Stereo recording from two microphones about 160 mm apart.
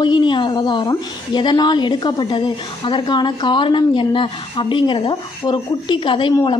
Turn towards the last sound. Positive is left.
turn(degrees=30)  # may be behind; listen again after turning